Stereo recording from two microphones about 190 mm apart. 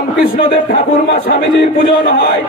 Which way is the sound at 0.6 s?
60° left (ahead or behind).